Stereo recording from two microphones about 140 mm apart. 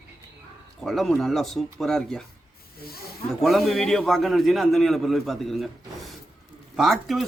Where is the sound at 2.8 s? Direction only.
90° left.